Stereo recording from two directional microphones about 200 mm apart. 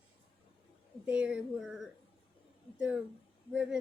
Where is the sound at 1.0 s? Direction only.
5° right (ahead or behind).